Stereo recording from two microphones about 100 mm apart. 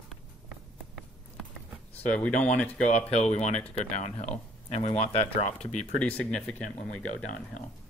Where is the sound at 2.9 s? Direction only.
90° left.